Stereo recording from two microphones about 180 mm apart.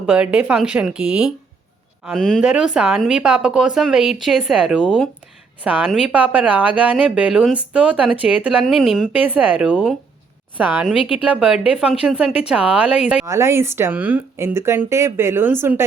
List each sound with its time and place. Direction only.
0.0 s speech: 5° right (ahead or behind)
13.2 s speech: 15° right (ahead or behind)